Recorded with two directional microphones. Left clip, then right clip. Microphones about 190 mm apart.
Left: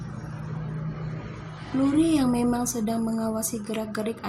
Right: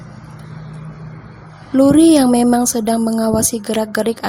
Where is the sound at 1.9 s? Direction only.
50° right (ahead or behind).